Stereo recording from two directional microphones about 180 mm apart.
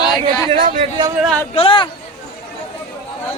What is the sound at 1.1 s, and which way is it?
Speech, centre (ahead or behind).